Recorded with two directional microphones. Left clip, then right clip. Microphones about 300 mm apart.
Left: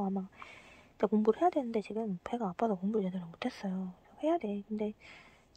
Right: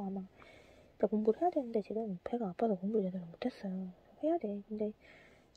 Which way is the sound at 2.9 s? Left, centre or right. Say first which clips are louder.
Even; left.